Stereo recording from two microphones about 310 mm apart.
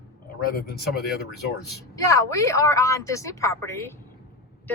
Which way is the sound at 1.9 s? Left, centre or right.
Centre.